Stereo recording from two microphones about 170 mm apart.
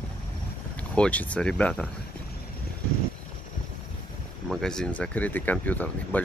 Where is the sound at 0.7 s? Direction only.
5° left (ahead or behind).